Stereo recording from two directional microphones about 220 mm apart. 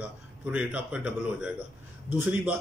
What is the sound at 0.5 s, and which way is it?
A man's voice, 5° right (ahead or behind).